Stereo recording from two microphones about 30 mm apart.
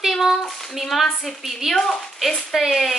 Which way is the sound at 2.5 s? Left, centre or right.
Centre.